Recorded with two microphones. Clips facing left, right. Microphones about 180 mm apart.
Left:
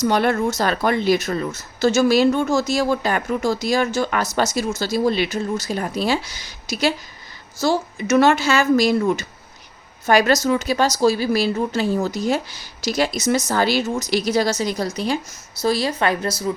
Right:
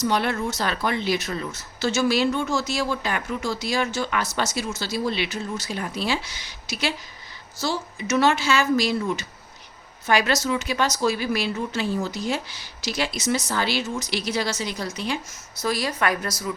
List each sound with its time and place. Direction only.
0.0 s a woman's voice: 45° left (ahead or behind); by 16.5 s 30° left (ahead or behind)